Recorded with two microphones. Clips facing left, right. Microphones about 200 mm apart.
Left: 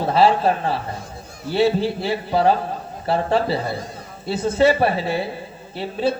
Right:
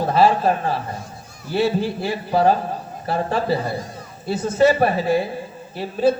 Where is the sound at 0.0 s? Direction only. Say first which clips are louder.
Even; 45° right (ahead or behind).